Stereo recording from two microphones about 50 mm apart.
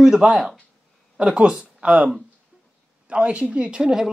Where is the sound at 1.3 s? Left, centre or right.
Right.